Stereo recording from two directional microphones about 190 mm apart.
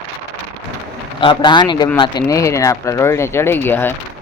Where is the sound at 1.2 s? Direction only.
25° left (ahead or behind).